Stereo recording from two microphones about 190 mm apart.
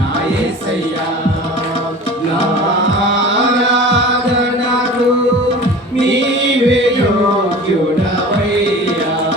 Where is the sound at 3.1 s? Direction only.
75° right (ahead or behind).